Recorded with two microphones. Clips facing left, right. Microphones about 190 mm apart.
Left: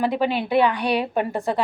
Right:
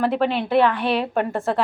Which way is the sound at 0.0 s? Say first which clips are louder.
Right 1 dB; centre (ahead or behind).